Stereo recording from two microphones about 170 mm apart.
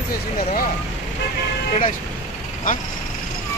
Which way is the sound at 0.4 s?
50° left (ahead or behind).